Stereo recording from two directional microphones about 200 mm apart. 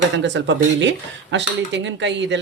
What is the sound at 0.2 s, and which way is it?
Speech, 65° right (ahead or behind).